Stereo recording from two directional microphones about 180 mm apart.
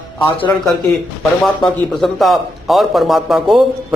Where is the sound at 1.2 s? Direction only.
Centre (ahead or behind).